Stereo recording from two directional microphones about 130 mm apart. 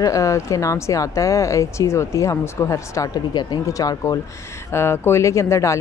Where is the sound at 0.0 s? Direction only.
25° left (ahead or behind).